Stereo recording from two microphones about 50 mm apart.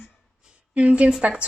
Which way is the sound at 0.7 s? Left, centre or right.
Right.